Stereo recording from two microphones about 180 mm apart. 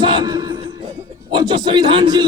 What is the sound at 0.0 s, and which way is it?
Music, 25° right (ahead or behind).